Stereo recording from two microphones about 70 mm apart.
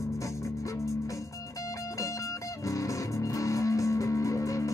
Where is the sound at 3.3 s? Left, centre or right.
Left.